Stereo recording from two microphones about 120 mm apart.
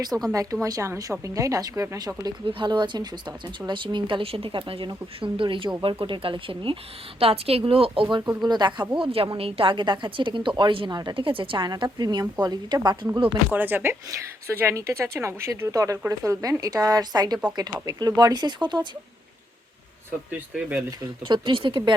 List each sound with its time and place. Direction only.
0.1 s speech: 10° right (ahead or behind)
0.6 s speech: 25° right (ahead or behind)
2.5 s a woman's voice: 40° right (ahead or behind)
8.4 s a woman's voice: 35° right (ahead or behind)
9.0 s a woman's voice: 45° right (ahead or behind)
13.5 s a woman's voice: 15° right (ahead or behind); by 18.9 s 40° right (ahead or behind)
20.5 s speech: 15° right (ahead or behind)
21.2 s a woman's voice: 40° right (ahead or behind)